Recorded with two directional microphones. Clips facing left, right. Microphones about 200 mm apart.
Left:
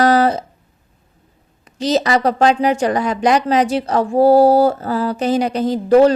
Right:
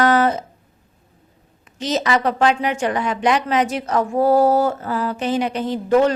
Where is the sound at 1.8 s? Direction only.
35° left (ahead or behind).